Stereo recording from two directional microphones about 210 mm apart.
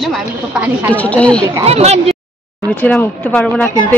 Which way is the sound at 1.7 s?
30° right (ahead or behind).